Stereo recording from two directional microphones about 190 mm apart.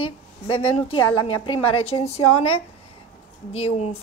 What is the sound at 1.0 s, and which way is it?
Speech, 90° left.